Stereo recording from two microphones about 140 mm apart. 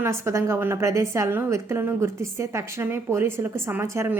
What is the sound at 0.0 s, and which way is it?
A woman's voice, 20° right (ahead or behind).